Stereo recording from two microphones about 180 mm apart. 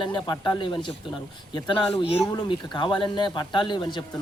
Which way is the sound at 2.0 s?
30° left (ahead or behind).